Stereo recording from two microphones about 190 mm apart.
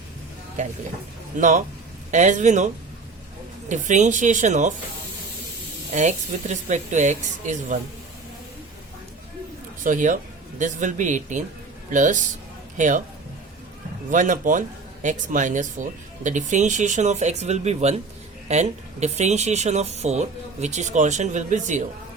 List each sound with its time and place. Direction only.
1.4 s speech: 40° right (ahead or behind)
3.7 s speech: 40° right (ahead or behind)
5.9 s speech: 35° right (ahead or behind)
9.8 s a man's voice: 45° right (ahead or behind)
14.1 s speech: 45° right (ahead or behind)